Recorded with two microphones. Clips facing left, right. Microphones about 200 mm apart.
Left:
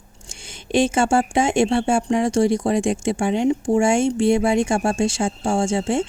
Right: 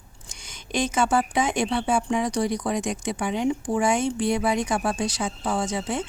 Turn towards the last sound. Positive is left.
turn(degrees=25)  # may be behind; listen again after turning